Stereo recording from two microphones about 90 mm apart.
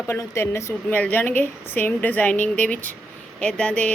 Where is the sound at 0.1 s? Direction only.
30° left (ahead or behind).